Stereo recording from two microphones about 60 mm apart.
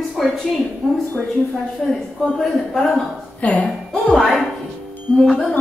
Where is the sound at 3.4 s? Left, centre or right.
Left.